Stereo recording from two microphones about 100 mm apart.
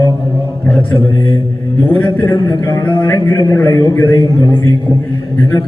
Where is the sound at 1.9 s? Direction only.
20° left (ahead or behind).